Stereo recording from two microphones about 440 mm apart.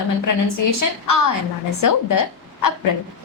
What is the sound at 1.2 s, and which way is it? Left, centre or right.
Speech, left.